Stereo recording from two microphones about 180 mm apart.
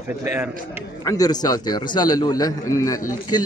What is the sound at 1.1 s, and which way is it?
A man's voice, 20° left (ahead or behind).